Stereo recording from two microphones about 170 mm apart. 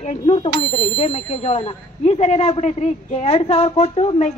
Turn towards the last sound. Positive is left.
turn(degrees=35)  # may be behind; listen again after turning